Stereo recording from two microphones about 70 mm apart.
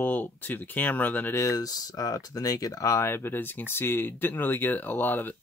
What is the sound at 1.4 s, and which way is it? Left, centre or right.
Speech, left.